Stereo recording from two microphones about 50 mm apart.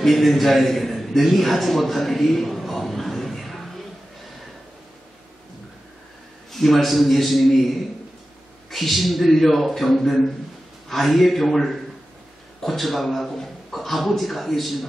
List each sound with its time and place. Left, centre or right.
0.0 s a man's voice: centre
6.5 s a man's voice: centre